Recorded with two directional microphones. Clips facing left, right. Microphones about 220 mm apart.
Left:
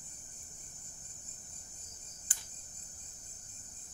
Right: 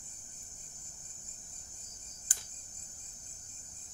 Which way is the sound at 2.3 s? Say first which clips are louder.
Right 3 dB; 40° right (ahead or behind).